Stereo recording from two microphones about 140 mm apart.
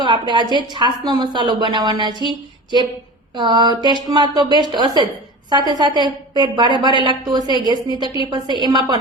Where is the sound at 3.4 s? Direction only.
35° right (ahead or behind).